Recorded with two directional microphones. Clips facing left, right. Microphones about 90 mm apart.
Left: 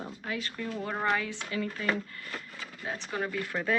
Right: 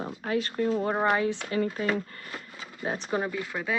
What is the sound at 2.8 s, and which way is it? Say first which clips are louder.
Speech: right 5 dB; 25° right (ahead or behind).